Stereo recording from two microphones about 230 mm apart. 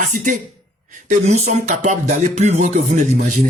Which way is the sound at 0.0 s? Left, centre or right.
Right.